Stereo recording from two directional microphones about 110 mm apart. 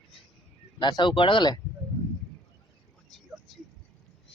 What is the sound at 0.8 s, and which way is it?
Speech, 45° left (ahead or behind).